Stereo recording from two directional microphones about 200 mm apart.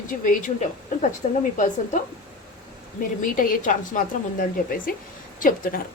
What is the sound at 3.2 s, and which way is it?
A woman's voice, 40° left (ahead or behind).